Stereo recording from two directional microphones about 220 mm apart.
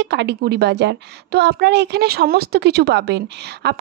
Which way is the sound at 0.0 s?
50° right (ahead or behind).